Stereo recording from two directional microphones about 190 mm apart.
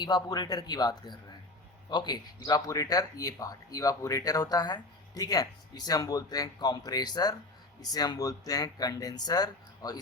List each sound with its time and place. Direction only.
0.0 s speech: 20° left (ahead or behind)